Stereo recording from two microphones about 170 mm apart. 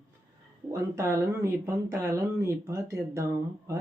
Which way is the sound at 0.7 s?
15° right (ahead or behind).